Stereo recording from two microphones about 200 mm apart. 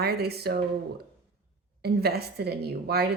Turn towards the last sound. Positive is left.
turn(degrees=-55)  # may be behind; listen again after turning